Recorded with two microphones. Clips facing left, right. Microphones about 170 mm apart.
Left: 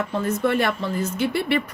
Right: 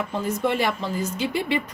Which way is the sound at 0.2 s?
15° right (ahead or behind).